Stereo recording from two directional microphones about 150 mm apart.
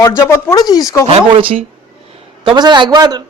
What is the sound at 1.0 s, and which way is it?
A man's voice, 40° right (ahead or behind).